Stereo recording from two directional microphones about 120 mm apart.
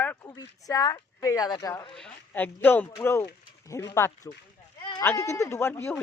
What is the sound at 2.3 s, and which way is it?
Speech, 15° left (ahead or behind).